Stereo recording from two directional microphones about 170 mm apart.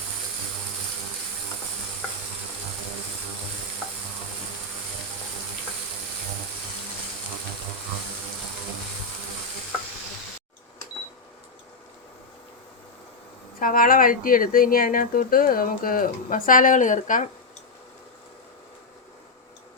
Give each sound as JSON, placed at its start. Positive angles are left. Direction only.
{"t": 13.6, "sound": "speech", "side_deg": 55}